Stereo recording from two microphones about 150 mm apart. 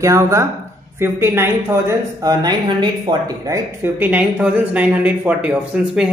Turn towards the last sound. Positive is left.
turn(degrees=-10)  # may be behind; listen again after turning